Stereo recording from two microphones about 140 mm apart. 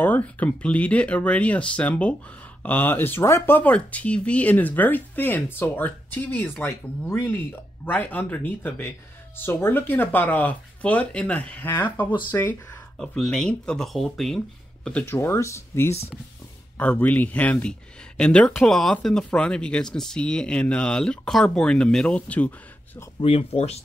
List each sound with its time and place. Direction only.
0.0 s speech: 10° left (ahead or behind)
14.9 s speech: 10° left (ahead or behind)
23.2 s speech: 45° left (ahead or behind)